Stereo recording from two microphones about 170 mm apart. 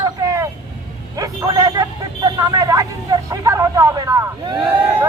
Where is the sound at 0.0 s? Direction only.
20° right (ahead or behind).